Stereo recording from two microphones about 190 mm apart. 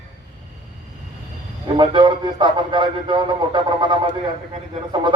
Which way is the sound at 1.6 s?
25° right (ahead or behind).